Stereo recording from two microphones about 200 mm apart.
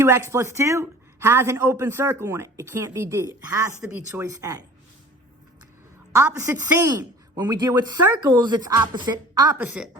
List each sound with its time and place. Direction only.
0.0 s speech: 15° right (ahead or behind)
6.1 s speech: 15° right (ahead or behind)
9.6 s a woman's voice: 5° right (ahead or behind)